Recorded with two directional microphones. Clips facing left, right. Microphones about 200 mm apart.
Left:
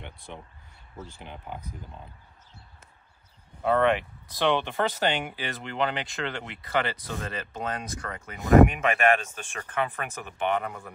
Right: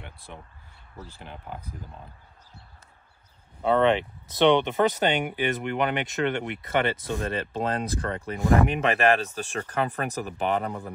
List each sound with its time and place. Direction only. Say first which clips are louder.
0.9 s speech: left 1 dB; centre (ahead or behind)
3.6 s speech: right 2 dB; 25° right (ahead or behind)
8.4 s speech: left 5 dB; 20° left (ahead or behind)
8.6 s speech: right 2 dB; 35° right (ahead or behind)